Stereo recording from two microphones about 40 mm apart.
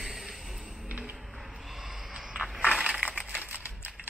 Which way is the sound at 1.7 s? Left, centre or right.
Centre.